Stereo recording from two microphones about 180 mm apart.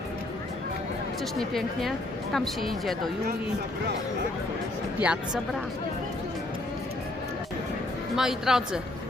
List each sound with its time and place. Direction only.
1.2 s speech: centre (ahead or behind)
5.0 s speech: 5° right (ahead or behind)
8.1 s speech: 5° right (ahead or behind)